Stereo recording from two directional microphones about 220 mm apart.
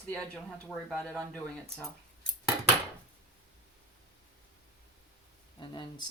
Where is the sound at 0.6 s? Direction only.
5° left (ahead or behind).